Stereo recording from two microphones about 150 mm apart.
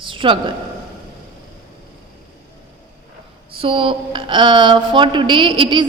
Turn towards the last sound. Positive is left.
turn(degrees=-35)  # may be behind; listen again after turning